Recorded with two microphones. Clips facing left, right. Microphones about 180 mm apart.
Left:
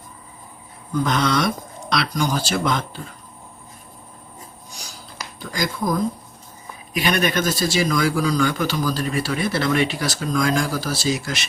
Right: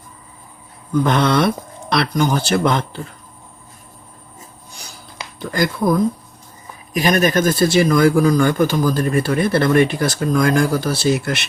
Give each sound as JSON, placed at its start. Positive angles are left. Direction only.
{"t": 1.0, "sound": "speech", "side_deg": -60}
{"t": 4.7, "sound": "a sound", "side_deg": -60}
{"t": 5.5, "sound": "speech", "side_deg": -60}
{"t": 6.9, "sound": "speech", "side_deg": -40}